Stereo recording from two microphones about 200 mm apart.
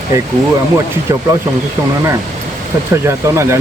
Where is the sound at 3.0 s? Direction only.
15° right (ahead or behind).